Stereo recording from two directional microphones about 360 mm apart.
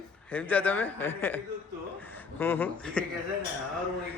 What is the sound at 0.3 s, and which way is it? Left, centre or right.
A man's voice, centre.